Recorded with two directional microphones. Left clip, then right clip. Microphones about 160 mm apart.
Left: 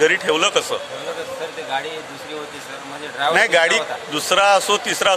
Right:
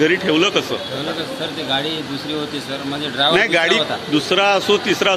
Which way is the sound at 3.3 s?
35° left (ahead or behind).